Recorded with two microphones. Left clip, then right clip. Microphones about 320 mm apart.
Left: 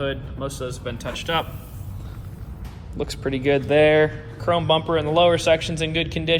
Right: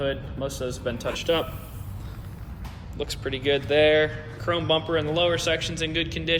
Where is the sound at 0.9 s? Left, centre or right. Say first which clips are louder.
Left 1 dB; centre.